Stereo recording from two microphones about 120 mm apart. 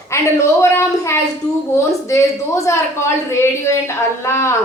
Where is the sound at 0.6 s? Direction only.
25° left (ahead or behind).